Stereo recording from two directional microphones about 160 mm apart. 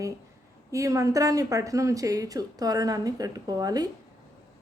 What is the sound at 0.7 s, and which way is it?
Speech, 20° right (ahead or behind).